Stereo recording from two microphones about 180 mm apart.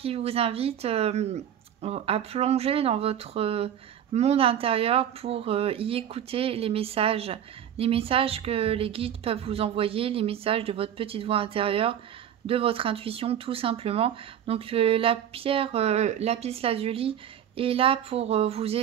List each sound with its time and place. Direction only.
0.0 s speech: 35° right (ahead or behind)